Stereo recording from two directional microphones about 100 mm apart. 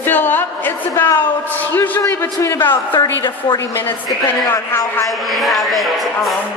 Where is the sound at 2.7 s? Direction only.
50° left (ahead or behind).